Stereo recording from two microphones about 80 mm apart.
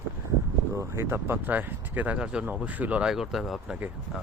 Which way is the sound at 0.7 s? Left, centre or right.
Right.